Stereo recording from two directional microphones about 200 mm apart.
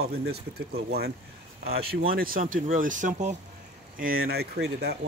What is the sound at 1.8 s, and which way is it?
Speech, 50° right (ahead or behind).